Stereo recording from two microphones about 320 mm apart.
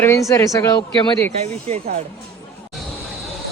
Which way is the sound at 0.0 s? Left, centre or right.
Centre.